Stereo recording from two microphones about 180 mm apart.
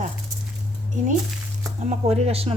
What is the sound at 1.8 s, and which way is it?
Speech, 35° right (ahead or behind).